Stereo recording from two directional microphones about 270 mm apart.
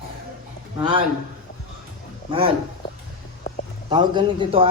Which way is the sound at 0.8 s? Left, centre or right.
Centre.